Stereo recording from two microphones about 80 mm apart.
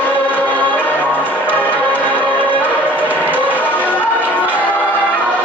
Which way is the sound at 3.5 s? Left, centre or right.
Left.